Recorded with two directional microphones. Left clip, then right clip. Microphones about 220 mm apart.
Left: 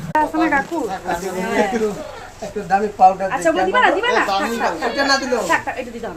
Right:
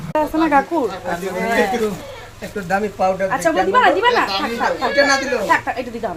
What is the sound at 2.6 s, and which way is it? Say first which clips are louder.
Speech: left 5 dB; 25° right (ahead or behind).